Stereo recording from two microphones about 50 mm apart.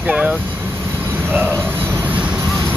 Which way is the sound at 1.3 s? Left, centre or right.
Right.